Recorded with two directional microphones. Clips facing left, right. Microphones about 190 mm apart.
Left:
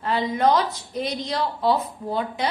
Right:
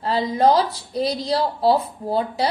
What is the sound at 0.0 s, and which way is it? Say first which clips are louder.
A woman's voice: right 3 dB; 35° right (ahead or behind).